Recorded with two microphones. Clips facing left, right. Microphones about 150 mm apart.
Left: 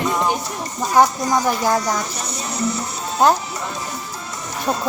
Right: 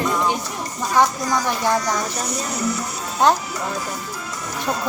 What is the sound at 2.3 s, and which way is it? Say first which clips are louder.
Speech: left 2 dB; 25° left (ahead or behind).